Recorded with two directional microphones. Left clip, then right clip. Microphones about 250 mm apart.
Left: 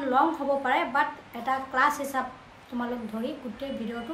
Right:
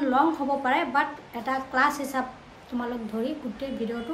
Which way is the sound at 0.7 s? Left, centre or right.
Centre.